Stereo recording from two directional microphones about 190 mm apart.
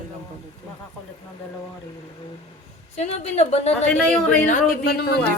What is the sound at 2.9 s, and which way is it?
Speech, 35° left (ahead or behind).